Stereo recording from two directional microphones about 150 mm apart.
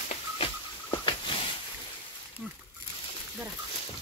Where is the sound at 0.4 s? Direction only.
35° left (ahead or behind).